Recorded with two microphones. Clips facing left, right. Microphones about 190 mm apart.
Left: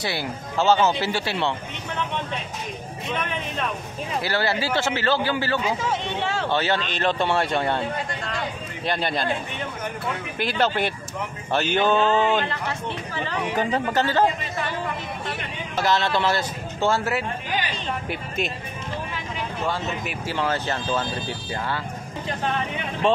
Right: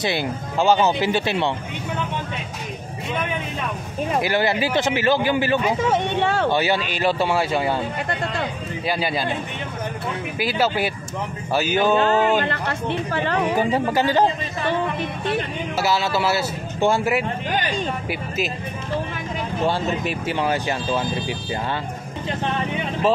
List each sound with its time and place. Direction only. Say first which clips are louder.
0.0 s speech: right 5 dB; 20° right (ahead or behind)
4.2 s speech: right 3 dB; 15° right (ahead or behind)
5.8 s speech: right 6 dB; 55° right (ahead or behind)
6.5 s speech: right 3 dB; 10° right (ahead or behind)
8.8 s speech: right 1 dB; 5° right (ahead or behind)
10.4 s speech: right 1 dB; 5° right (ahead or behind)
12.4 s speech: right 4 dB; 65° right (ahead or behind)
13.6 s speech: left 1 dB; 10° right (ahead or behind)
15.8 s speech: even; 5° right (ahead or behind)
19.6 s speech: right 6 dB; 30° right (ahead or behind)
20.3 s speech: even; 15° right (ahead or behind)